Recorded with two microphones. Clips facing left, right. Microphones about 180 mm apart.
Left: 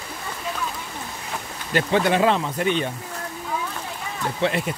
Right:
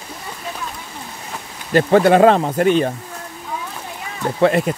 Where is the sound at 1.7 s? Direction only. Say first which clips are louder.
Right 8 dB; 45° right (ahead or behind).